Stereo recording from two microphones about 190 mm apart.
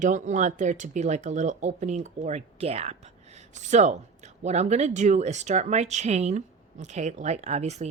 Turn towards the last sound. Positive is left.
turn(degrees=-35)  # may be behind; listen again after turning